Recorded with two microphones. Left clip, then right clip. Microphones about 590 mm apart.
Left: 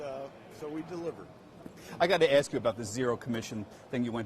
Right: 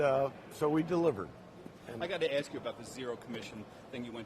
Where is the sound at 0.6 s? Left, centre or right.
Right.